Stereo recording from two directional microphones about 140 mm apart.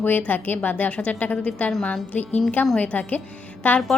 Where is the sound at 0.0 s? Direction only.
10° left (ahead or behind).